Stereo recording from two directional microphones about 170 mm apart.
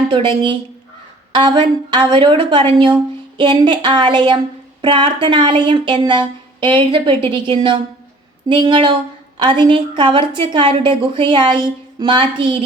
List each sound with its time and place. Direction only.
0.1 s a woman's voice: 30° right (ahead or behind)
8.4 s a woman's voice: 30° right (ahead or behind)